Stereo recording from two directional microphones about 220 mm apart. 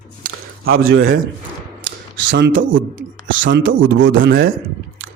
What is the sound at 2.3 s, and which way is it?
Speech, 50° right (ahead or behind).